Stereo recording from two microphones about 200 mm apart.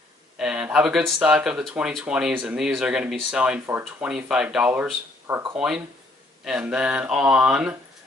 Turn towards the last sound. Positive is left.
turn(degrees=-5)  # may be behind; listen again after turning